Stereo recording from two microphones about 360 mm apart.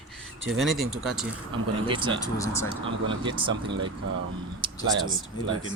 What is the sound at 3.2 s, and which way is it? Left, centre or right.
Speech, centre.